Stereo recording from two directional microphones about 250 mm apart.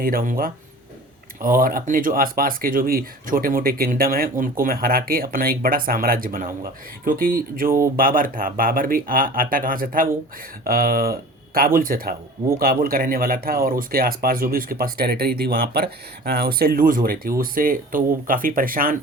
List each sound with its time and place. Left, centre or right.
0.0 s speech: right